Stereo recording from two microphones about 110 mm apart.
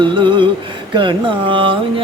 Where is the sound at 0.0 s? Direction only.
45° right (ahead or behind).